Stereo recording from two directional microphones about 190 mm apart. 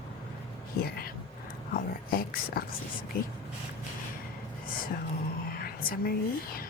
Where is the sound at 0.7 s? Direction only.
55° left (ahead or behind).